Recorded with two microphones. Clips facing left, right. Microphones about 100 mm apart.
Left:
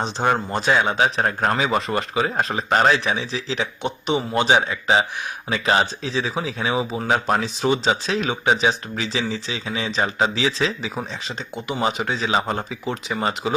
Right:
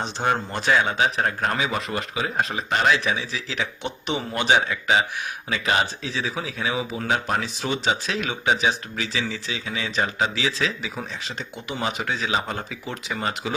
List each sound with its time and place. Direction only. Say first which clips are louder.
0.2 s speech: left 3 dB; 30° left (ahead or behind)